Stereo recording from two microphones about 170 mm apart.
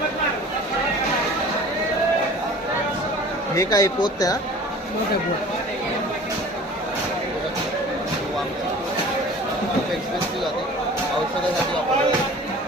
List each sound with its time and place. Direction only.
3.5 s speech: 20° left (ahead or behind)